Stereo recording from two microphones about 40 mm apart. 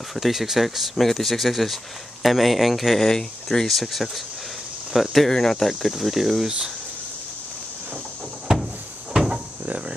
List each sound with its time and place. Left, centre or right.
0.1 s speech: centre
3.1 s speech: centre
3.6 s speech: centre
5.3 s speech: centre
9.1 s cupboard open or close: centre